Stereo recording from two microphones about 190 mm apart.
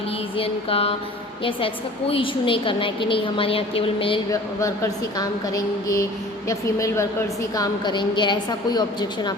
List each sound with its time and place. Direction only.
0.3 s a woman's voice: 30° left (ahead or behind)
4.3 s a woman's voice: 15° left (ahead or behind)